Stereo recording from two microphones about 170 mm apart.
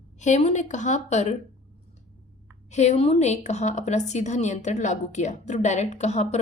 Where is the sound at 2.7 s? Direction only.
40° left (ahead or behind).